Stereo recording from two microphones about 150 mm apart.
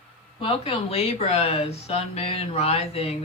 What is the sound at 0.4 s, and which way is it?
Speech, 40° left (ahead or behind).